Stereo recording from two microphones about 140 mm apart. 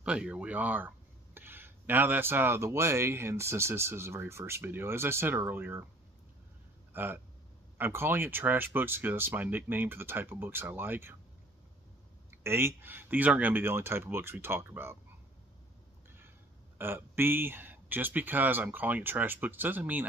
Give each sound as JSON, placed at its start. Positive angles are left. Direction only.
{"t": 0.0, "sound": "speech", "side_deg": -10}
{"t": 6.9, "sound": "a sound", "side_deg": -15}
{"t": 7.7, "sound": "speech", "side_deg": -15}
{"t": 12.3, "sound": "speech", "side_deg": -15}
{"t": 16.7, "sound": "speech", "side_deg": -15}